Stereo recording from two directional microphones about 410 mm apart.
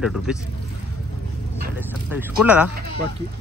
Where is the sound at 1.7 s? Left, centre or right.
Centre.